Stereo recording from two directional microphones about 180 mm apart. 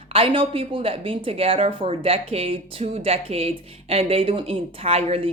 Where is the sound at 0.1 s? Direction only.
30° right (ahead or behind).